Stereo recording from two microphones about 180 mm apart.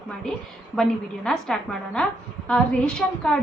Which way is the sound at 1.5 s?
5° left (ahead or behind).